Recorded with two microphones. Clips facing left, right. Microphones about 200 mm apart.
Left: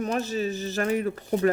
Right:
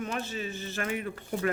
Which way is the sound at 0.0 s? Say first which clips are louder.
Left 7 dB; 40° left (ahead or behind).